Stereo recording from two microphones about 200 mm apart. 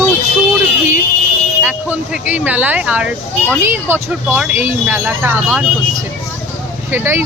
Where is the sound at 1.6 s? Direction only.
10° right (ahead or behind).